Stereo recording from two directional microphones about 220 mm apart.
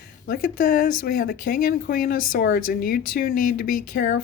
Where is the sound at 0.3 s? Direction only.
40° left (ahead or behind).